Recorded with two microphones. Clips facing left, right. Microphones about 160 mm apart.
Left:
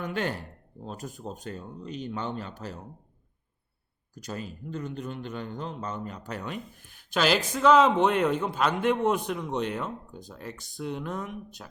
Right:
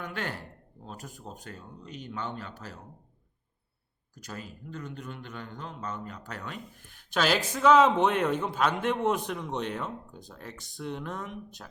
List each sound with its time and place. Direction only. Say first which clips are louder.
0.0 s a man's voice: left 5 dB; 20° left (ahead or behind)
4.2 s a man's voice: left 5 dB; 20° left (ahead or behind)
7.1 s a man's voice: left 2 dB; centre (ahead or behind)